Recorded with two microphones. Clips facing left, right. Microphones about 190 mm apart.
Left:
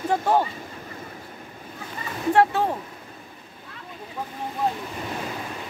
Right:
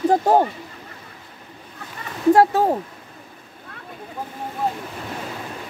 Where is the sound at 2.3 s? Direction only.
40° right (ahead or behind).